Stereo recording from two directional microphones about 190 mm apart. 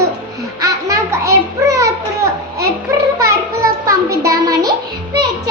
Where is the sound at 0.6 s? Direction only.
15° right (ahead or behind).